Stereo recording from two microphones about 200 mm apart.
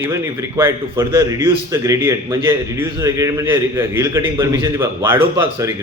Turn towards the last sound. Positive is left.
turn(degrees=-10)  # may be behind; listen again after turning